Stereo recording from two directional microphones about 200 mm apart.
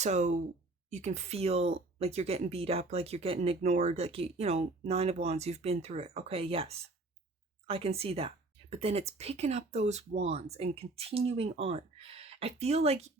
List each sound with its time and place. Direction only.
0.0 s speech: 35° right (ahead or behind)